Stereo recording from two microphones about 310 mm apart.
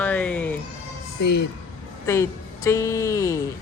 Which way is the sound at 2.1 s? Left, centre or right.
Centre.